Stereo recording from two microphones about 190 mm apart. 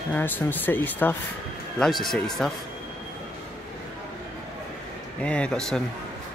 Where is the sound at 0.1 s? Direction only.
10° left (ahead or behind).